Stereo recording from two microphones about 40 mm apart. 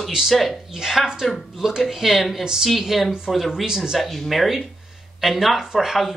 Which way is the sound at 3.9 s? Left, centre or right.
Centre.